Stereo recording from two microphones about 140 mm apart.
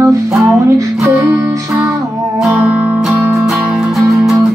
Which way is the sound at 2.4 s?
10° right (ahead or behind).